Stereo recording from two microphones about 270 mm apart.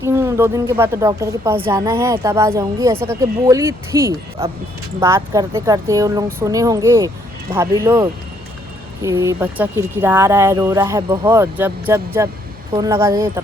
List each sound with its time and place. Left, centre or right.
0.0 s speech: centre